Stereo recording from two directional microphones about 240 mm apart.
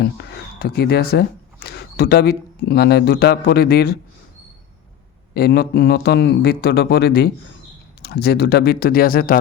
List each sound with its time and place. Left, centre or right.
0.0 s speech: left
5.3 s a man's voice: left